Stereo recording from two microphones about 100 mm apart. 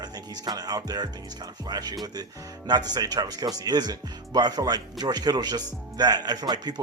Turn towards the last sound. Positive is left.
turn(degrees=-45)  # may be behind; listen again after turning